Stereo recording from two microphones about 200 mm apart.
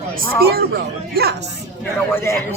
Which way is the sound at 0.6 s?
50° right (ahead or behind).